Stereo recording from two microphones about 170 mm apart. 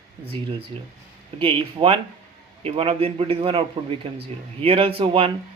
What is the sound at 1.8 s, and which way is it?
A man's voice, 30° right (ahead or behind).